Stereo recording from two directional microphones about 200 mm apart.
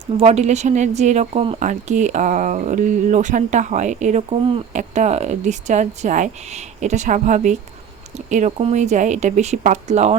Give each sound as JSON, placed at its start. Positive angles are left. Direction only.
{"t": 0.2, "sound": "speech", "side_deg": -35}